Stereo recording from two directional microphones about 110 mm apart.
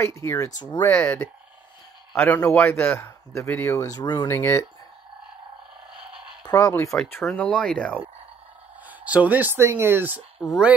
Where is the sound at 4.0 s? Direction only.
45° left (ahead or behind).